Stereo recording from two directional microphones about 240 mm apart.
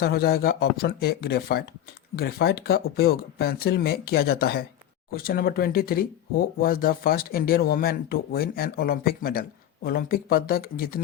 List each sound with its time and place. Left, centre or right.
0.0 s speech: left